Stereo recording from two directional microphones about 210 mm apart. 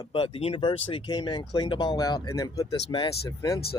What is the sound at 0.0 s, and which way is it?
A man's voice, 25° left (ahead or behind).